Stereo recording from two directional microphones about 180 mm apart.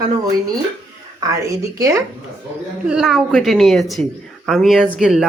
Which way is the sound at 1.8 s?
15° right (ahead or behind).